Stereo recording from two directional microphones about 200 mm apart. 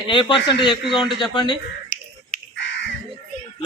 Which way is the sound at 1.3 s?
20° left (ahead or behind).